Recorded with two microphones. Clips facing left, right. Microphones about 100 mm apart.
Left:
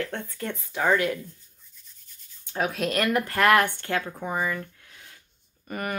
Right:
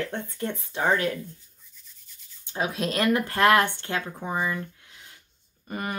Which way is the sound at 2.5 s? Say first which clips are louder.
Left 1 dB; 20° right (ahead or behind).